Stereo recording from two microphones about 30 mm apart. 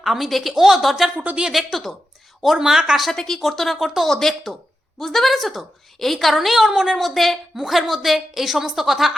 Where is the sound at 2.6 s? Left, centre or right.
Centre.